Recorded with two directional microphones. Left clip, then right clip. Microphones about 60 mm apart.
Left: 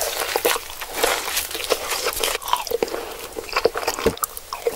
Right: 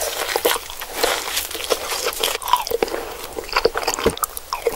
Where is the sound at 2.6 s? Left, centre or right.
Centre.